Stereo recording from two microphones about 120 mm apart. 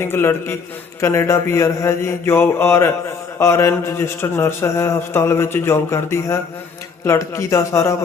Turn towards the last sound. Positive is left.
turn(degrees=25)  # may be behind; listen again after turning